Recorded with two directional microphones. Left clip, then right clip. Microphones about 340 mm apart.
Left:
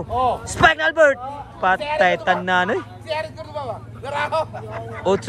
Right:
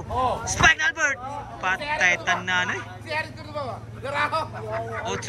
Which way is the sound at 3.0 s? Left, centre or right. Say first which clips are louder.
Left 3 dB; left.